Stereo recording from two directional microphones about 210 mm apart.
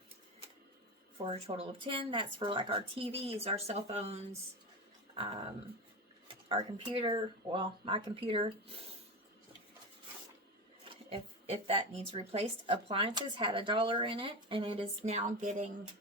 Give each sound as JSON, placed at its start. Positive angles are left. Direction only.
{"t": 1.2, "sound": "speech", "side_deg": -30}
{"t": 10.8, "sound": "speech", "side_deg": -25}